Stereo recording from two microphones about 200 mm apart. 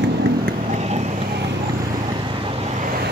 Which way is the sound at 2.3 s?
25° right (ahead or behind).